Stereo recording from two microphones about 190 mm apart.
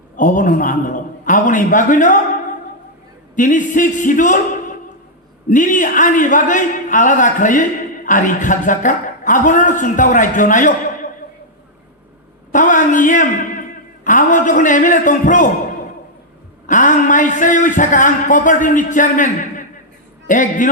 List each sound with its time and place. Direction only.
0.2 s speech: 45° left (ahead or behind)
3.3 s speech: 40° left (ahead or behind)
5.5 s speech: 40° left (ahead or behind)
12.5 s a man's voice: 45° left (ahead or behind)
16.6 s speech: 45° left (ahead or behind)